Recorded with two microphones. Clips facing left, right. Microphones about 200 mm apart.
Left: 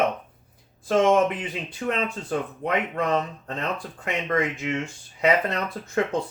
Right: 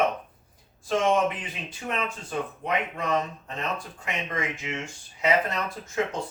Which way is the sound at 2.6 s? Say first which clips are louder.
Left 4 dB; 55° left (ahead or behind).